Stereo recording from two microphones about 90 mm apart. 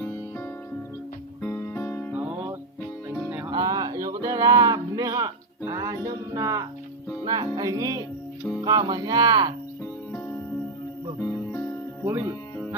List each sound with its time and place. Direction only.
0.0 s music: 25° left (ahead or behind)
2.1 s music: 15° right (ahead or behind)
3.5 s music: 45° right (ahead or behind)
7.3 s speech: 45° right (ahead or behind)
11.2 s music: 25° left (ahead or behind)
12.0 s speech: 25° right (ahead or behind)